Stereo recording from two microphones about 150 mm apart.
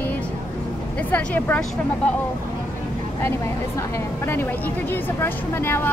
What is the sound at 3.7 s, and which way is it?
A woman's voice, 15° left (ahead or behind).